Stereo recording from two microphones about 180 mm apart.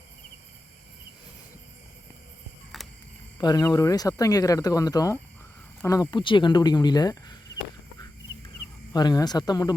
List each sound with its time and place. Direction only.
2.7 s cricket: centre (ahead or behind)
3.3 s speech: 20° left (ahead or behind)
8.9 s speech: 20° left (ahead or behind)